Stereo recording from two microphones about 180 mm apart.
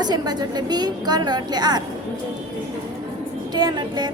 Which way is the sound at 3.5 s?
25° right (ahead or behind).